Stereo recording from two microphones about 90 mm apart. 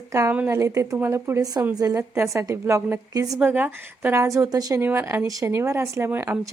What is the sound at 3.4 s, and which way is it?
A woman's voice, 20° right (ahead or behind).